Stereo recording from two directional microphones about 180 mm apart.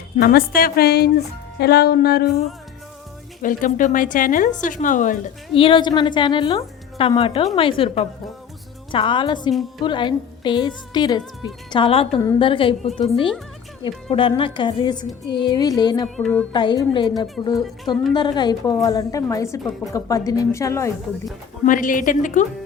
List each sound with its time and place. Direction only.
0.2 s speech: 55° left (ahead or behind)
3.4 s a woman's voice: 45° left (ahead or behind)
5.5 s a woman's voice: 30° left (ahead or behind)
9.5 s a woman's voice: centre (ahead or behind)
9.8 s a woman's voice: 25° left (ahead or behind)
16.1 s a woman's voice: 5° left (ahead or behind)
16.5 s a woman's voice: 25° left (ahead or behind)
21.7 s a woman's voice: 45° left (ahead or behind)